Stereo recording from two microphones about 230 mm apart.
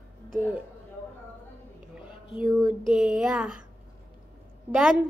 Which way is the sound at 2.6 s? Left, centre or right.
Centre.